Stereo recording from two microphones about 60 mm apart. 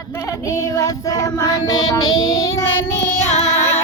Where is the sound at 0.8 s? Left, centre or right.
Left.